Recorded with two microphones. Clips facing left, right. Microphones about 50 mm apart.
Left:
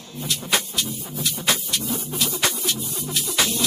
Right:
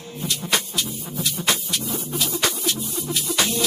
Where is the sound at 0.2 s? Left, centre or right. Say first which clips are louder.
Even; centre.